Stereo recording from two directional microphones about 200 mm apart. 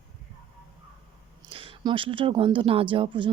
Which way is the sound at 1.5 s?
25° right (ahead or behind).